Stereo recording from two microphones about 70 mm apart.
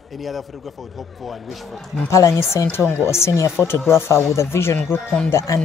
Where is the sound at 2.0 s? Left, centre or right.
Left.